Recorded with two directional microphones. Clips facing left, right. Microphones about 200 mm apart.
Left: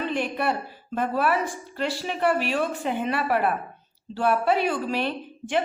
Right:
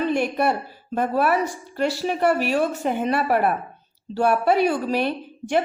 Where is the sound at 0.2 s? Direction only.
45° right (ahead or behind).